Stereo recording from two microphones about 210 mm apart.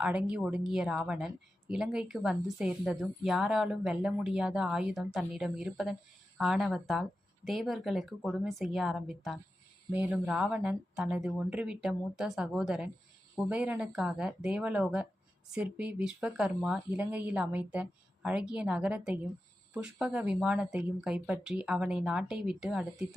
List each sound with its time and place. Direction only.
0.0 s a woman's voice: 5° right (ahead or behind)